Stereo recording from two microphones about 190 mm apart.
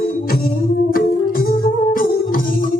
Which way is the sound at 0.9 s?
50° left (ahead or behind).